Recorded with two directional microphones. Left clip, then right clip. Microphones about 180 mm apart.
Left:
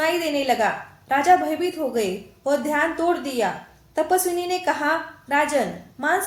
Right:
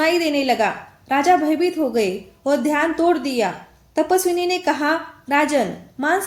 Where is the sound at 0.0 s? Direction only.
35° right (ahead or behind).